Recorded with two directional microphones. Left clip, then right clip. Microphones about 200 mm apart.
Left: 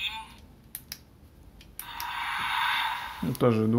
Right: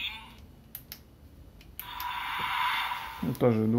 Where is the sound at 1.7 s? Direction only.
10° left (ahead or behind).